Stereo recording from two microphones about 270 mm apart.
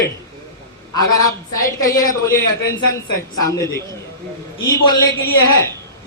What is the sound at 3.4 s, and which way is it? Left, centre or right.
Speech, centre.